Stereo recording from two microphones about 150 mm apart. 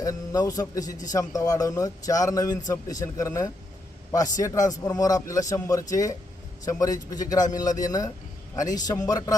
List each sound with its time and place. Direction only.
0.0 s a man's voice: 25° left (ahead or behind)